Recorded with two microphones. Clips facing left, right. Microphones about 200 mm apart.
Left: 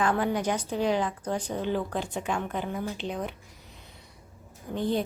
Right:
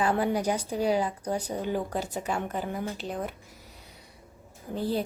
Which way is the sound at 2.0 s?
40° right (ahead or behind).